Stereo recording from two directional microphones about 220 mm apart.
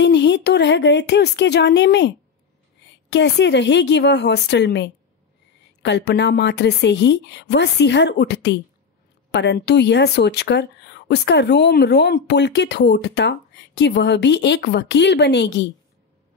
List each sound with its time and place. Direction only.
0.0 s speech: 50° left (ahead or behind)